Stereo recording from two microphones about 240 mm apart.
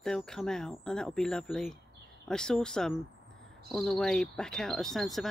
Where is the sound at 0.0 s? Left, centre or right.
Centre.